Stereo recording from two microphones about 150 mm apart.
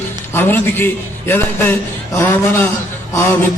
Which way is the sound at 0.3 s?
15° left (ahead or behind).